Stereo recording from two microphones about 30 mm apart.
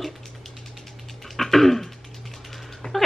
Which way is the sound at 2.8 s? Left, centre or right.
Centre.